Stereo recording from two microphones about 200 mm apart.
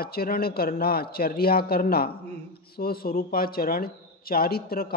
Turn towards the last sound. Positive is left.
turn(degrees=50)  # may be behind; listen again after turning